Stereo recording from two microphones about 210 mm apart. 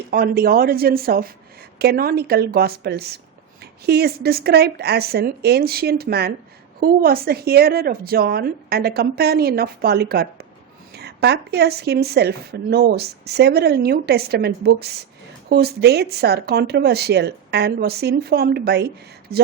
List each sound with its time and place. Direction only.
0.1 s speech: 45° right (ahead or behind)